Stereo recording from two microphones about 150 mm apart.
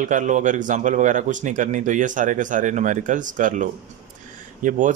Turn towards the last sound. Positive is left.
turn(degrees=-60)  # may be behind; listen again after turning